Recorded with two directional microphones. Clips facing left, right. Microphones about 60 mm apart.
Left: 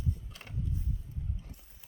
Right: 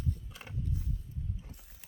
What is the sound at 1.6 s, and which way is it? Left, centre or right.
Clip-clop, right.